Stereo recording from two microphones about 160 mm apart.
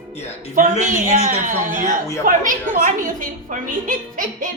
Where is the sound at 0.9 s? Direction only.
55° right (ahead or behind).